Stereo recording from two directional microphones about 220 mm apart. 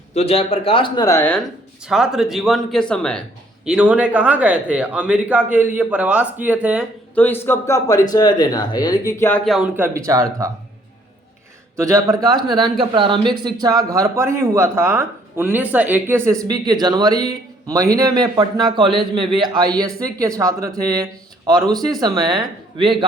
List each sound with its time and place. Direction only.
0.1 s speech: 30° left (ahead or behind); by 1.4 s 10° left (ahead or behind)
1.9 s speech: centre (ahead or behind)
7.2 s speech: 10° left (ahead or behind); by 10.5 s 15° right (ahead or behind)
11.8 s speech: 15° right (ahead or behind)